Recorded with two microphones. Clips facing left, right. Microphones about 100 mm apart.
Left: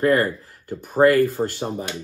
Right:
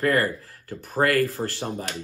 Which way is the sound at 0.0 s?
20° left (ahead or behind).